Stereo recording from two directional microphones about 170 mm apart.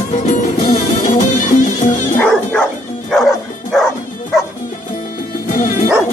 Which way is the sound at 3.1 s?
Centre (ahead or behind).